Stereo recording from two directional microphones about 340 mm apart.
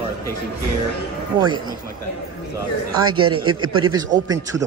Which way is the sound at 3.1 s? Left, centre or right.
Right.